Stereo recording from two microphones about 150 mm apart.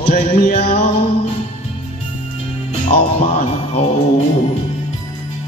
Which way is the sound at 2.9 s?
45° left (ahead or behind).